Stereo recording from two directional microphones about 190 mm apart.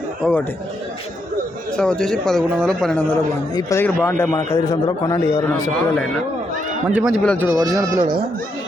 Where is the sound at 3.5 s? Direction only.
20° left (ahead or behind).